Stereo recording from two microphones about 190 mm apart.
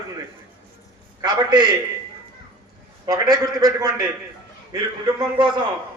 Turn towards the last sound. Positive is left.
turn(degrees=-20)  # may be behind; listen again after turning